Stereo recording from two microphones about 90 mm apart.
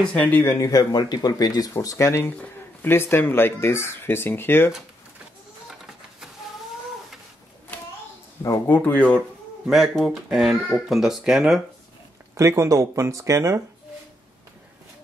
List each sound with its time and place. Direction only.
0.0 s speech: 15° left (ahead or behind)
0.4 s speech: 30° left (ahead or behind)
0.7 s speech: 45° left (ahead or behind); by 4.7 s 25° left (ahead or behind)
8.6 s speech: 20° left (ahead or behind)
9.7 s speech: centre (ahead or behind)
12.4 s speech: 35° right (ahead or behind)